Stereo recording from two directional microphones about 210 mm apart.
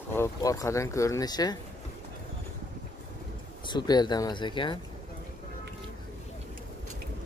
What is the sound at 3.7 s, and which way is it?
Speech, 20° left (ahead or behind).